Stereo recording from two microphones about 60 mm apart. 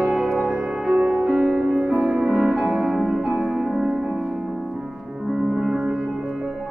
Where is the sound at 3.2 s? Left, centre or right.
Centre.